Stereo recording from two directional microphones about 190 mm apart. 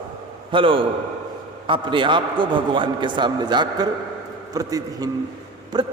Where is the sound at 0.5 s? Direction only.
25° right (ahead or behind).